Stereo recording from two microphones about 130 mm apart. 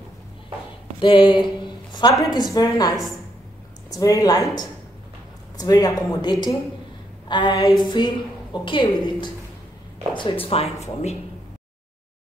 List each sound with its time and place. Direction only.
1.0 s speech: 40° left (ahead or behind)
7.2 s a sound: 35° left (ahead or behind)
10.1 s speech: 40° left (ahead or behind); by 11.1 s 55° left (ahead or behind)